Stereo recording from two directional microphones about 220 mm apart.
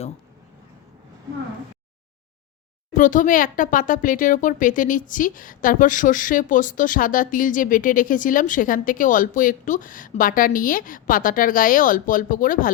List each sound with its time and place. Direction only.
2.9 s speech: 35° left (ahead or behind)